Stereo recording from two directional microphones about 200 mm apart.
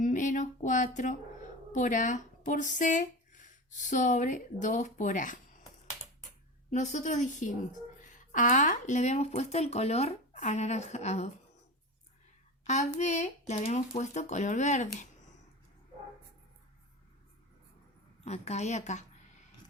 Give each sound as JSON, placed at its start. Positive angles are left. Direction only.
{"t": 0.0, "sound": "a sound", "side_deg": 40}
{"t": 1.7, "sound": "speech", "side_deg": 40}
{"t": 6.7, "sound": "speech", "side_deg": 35}
{"t": 12.6, "sound": "speech", "side_deg": 35}
{"t": 18.3, "sound": "speech", "side_deg": 35}